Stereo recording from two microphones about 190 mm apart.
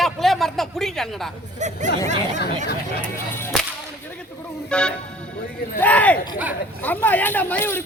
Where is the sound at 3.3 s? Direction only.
10° left (ahead or behind).